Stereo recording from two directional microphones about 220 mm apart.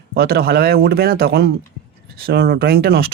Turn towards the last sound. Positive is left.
turn(degrees=-45)  # may be behind; listen again after turning